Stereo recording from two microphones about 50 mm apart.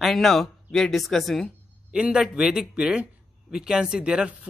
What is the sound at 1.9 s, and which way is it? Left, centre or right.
Speech, right.